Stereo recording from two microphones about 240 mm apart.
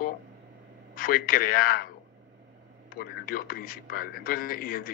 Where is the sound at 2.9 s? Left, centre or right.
Left.